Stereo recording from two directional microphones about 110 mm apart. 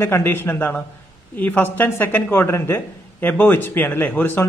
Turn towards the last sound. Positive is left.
turn(degrees=15)  # may be behind; listen again after turning